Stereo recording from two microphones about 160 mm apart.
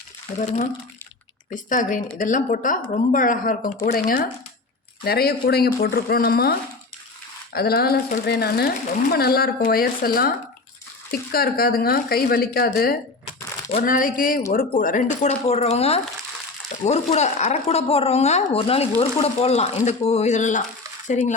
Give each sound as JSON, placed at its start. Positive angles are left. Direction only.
{"t": 0.3, "sound": "speech", "side_deg": 50}
{"t": 5.0, "sound": "speech", "side_deg": 75}